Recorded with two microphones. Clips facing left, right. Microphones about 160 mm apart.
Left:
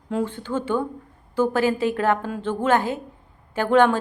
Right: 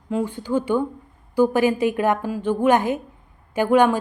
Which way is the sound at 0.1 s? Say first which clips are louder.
Right 3 dB; 5° right (ahead or behind).